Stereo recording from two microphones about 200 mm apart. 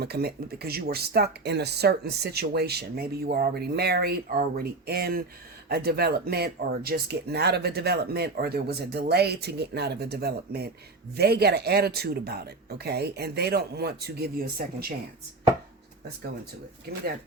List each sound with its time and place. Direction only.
0.0 s speech: 50° right (ahead or behind)